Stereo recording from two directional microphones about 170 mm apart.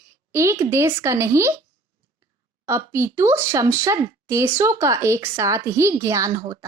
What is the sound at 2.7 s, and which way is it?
Speech, 15° right (ahead or behind).